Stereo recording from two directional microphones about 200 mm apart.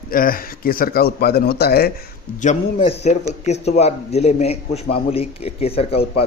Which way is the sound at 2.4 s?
35° left (ahead or behind).